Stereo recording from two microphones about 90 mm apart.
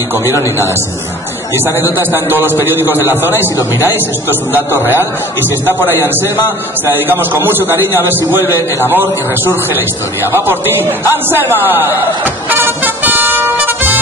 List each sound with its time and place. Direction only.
1.8 s a man's voice: 25° right (ahead or behind)
4.7 s a man's voice: 25° right (ahead or behind)
7.1 s a man's voice: 25° right (ahead or behind)
12.4 s music: 20° right (ahead or behind)